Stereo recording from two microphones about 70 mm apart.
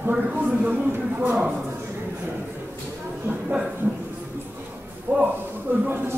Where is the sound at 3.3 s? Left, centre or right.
Right.